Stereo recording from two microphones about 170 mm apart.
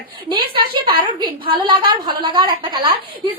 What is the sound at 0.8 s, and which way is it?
A woman's voice, 25° right (ahead or behind).